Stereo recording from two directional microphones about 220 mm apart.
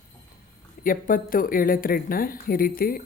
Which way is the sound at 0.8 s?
40° left (ahead or behind).